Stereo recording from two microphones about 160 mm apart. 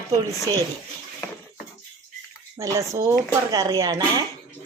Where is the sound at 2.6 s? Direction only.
20° right (ahead or behind).